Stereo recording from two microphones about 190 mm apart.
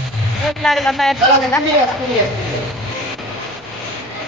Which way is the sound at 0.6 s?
Centre (ahead or behind).